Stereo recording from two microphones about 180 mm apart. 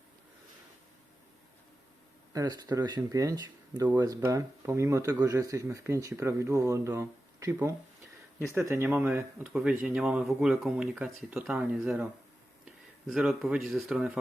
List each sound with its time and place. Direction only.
2.3 s speech: 20° right (ahead or behind)
13.1 s speech: 5° right (ahead or behind)